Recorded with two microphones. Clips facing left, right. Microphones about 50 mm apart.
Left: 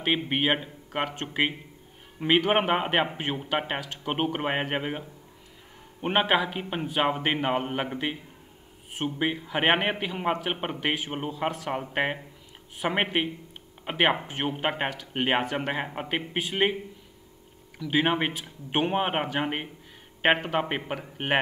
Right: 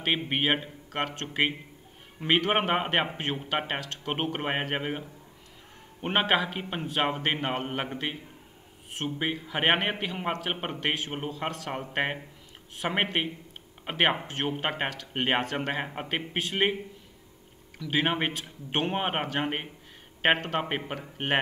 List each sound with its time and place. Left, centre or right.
0.1 s a man's voice: centre
14.2 s a man's voice: centre
17.7 s a man's voice: centre